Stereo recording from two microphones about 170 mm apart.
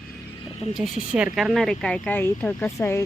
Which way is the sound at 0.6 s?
Centre (ahead or behind).